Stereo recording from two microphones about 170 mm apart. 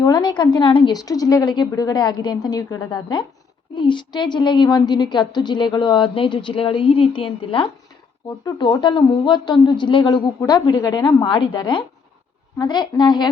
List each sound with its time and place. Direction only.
0.0 s a woman's voice: 25° left (ahead or behind)